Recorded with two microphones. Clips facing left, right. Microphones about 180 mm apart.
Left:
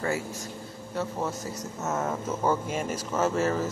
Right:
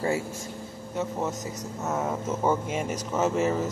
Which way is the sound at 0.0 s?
25° right (ahead or behind).